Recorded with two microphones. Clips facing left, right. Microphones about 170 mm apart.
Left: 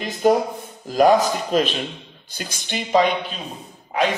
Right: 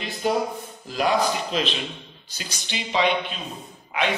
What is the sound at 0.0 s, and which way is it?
A man's voice, 45° left (ahead or behind).